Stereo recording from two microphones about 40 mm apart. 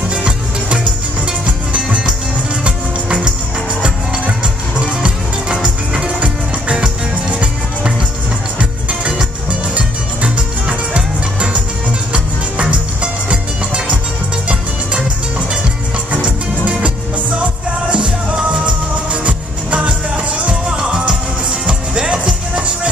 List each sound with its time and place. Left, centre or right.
0.1 s music: right
4.7 s music: right
10.3 s music: right
13.0 s music: right
16.1 s music: right
17.9 s music: right
20.6 s music: right